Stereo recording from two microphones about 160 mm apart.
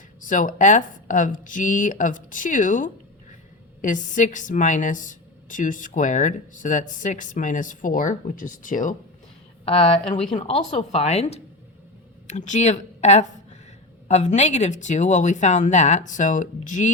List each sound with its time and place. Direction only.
0.2 s a woman's voice: 55° left (ahead or behind)
9.6 s speech: 35° left (ahead or behind)
10.3 s a woman's voice: 45° left (ahead or behind)